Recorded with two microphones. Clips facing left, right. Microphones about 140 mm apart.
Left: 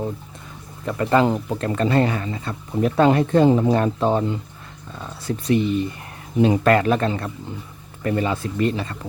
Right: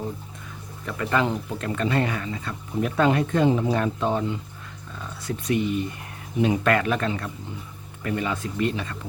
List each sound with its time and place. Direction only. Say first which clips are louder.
0.9 s speech: left 6 dB; 35° left (ahead or behind)